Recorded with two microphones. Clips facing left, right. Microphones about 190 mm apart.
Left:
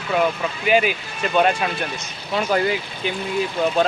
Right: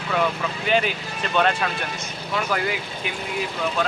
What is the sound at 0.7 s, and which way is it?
Speech, 10° left (ahead or behind).